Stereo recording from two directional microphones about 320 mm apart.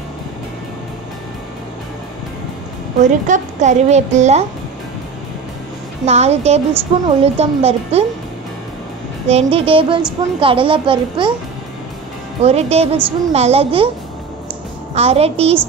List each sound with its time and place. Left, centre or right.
3.0 s a woman's voice: right
6.0 s a woman's voice: centre
9.3 s a child's voice: centre
12.4 s a woman's voice: centre
15.0 s a woman's voice: centre